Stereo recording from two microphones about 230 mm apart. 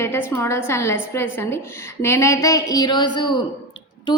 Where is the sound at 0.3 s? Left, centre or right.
Centre.